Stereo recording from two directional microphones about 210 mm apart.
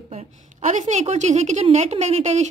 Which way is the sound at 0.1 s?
30° right (ahead or behind).